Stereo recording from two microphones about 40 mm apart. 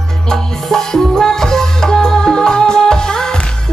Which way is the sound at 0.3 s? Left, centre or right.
Centre.